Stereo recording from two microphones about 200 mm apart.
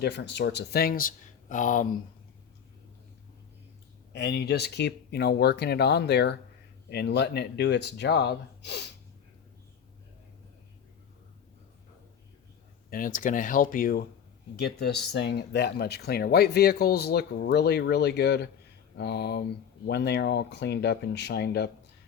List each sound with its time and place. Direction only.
0.0 s speech: 60° left (ahead or behind); by 1.9 s 40° left (ahead or behind)
4.1 s speech: 55° left (ahead or behind)
12.9 s speech: 40° left (ahead or behind)